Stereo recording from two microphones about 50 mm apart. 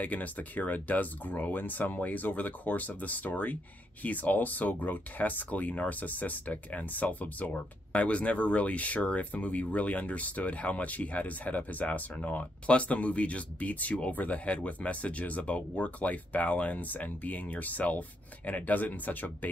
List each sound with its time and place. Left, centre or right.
0.0 s speech: left